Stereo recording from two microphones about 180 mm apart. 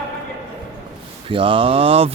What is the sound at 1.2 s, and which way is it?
Speech, 30° right (ahead or behind).